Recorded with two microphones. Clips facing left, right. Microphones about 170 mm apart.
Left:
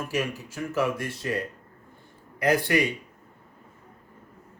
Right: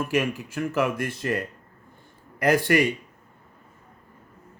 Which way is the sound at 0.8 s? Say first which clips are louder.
Right 1 dB; 50° right (ahead or behind).